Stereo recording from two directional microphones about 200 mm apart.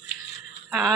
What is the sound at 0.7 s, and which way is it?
Speech, centre (ahead or behind).